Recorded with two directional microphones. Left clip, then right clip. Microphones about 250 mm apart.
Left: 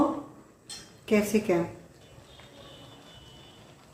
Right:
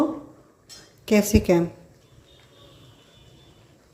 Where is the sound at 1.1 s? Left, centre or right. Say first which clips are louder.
Right 5 dB; right.